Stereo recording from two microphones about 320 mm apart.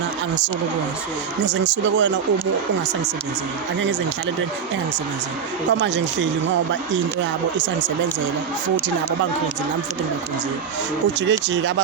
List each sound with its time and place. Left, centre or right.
1.5 s speech: right
5.8 s speech: right
11.3 s speech: right